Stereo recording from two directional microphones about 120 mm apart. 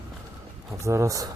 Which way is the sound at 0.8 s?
25° right (ahead or behind).